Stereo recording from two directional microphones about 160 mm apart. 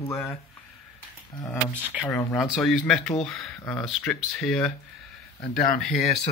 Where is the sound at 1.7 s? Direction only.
10° right (ahead or behind); by 3.9 s 10° left (ahead or behind).